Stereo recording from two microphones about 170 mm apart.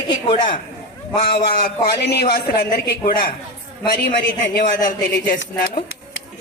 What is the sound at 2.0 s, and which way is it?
A man's voice, 70° left (ahead or behind).